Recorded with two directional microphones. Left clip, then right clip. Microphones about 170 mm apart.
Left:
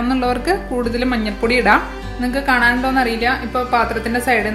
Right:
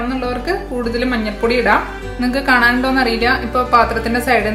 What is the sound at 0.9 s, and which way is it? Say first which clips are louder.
Speech: right 1 dB; 25° left (ahead or behind).